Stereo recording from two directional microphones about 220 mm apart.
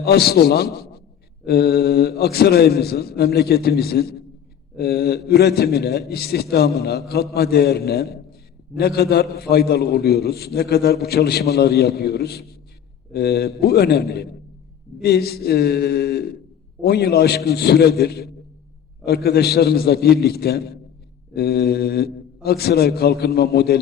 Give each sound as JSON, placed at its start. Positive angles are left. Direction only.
{"t": 0.0, "sound": "a man's voice", "side_deg": 45}